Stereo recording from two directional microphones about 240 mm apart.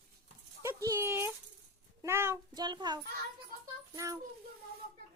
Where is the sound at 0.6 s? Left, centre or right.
Centre.